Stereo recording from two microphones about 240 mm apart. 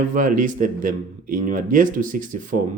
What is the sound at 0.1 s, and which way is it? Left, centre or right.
Speech, right.